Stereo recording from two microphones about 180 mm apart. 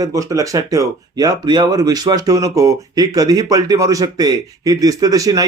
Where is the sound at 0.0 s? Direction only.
20° right (ahead or behind).